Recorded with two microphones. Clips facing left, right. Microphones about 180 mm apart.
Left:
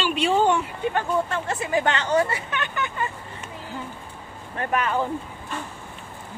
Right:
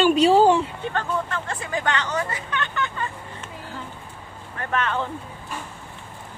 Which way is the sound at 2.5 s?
15° left (ahead or behind).